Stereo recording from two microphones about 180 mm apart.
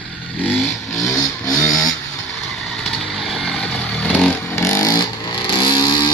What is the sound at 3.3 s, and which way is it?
Vehicle, centre (ahead or behind).